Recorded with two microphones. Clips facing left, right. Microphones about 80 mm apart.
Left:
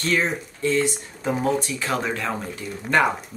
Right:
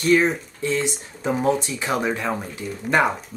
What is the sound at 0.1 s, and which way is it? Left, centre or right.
Speech, right.